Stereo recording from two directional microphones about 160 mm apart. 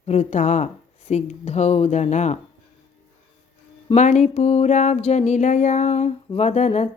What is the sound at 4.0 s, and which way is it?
Speech, 45° left (ahead or behind).